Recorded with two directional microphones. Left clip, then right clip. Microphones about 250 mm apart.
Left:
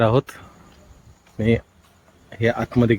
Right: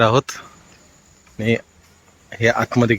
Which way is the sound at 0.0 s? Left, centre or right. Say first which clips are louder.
Right 3 dB; centre.